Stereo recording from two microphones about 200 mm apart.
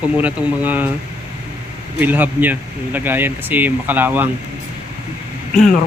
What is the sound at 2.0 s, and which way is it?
Speech, 10° right (ahead or behind).